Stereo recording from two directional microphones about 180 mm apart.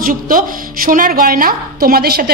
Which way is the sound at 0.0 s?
50° right (ahead or behind).